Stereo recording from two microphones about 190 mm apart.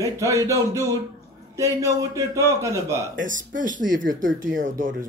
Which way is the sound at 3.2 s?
45° right (ahead or behind).